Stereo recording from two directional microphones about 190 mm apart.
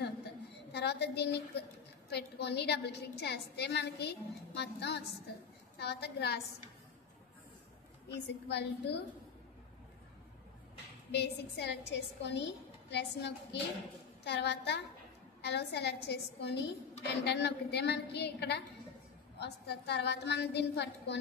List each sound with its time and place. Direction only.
0.7 s a woman's voice: 60° left (ahead or behind)
8.5 s a woman's voice: 60° left (ahead or behind)
11.1 s a woman's voice: 60° left (ahead or behind)